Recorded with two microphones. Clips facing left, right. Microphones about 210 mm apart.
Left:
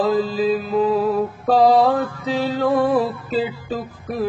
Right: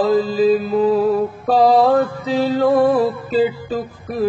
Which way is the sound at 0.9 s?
Centre (ahead or behind).